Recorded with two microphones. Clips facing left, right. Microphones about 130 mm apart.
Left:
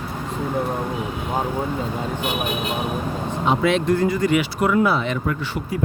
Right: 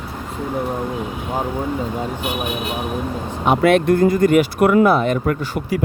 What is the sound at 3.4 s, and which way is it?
Speech, 60° right (ahead or behind).